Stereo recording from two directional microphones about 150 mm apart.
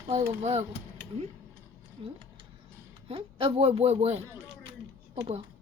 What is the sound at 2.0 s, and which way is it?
A woman's voice, 40° right (ahead or behind).